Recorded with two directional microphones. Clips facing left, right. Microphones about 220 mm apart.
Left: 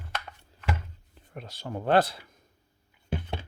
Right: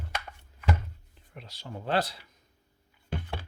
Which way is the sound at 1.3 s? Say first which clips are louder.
Left 6 dB; 50° left (ahead or behind).